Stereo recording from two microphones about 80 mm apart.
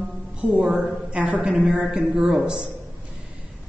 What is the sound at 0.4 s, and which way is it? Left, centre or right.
A man's voice, centre.